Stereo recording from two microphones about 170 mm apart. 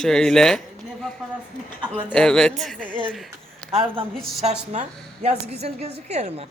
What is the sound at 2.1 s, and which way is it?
Speech, 5° left (ahead or behind).